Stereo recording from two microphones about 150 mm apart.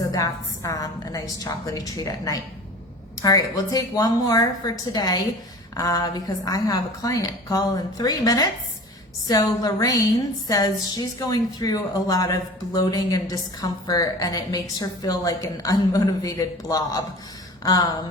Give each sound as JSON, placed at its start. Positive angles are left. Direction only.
{"t": 0.1, "sound": "a woman's voice", "side_deg": 25}